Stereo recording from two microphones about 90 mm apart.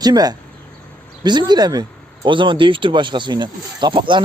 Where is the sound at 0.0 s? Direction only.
50° right (ahead or behind).